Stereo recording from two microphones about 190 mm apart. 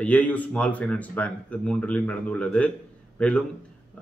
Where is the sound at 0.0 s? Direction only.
5° left (ahead or behind).